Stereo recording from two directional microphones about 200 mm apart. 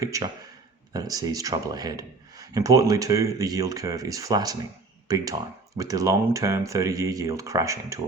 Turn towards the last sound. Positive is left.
turn(degrees=-15)  # may be behind; listen again after turning